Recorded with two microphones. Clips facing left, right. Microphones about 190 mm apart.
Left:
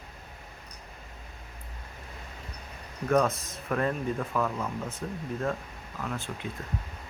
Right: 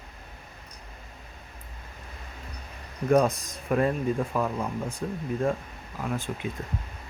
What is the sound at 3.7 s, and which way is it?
Speech, 15° right (ahead or behind).